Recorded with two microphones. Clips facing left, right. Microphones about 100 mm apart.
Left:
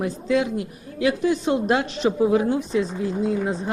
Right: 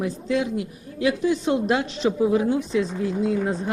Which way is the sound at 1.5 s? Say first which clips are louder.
Left 1 dB; 40° left (ahead or behind).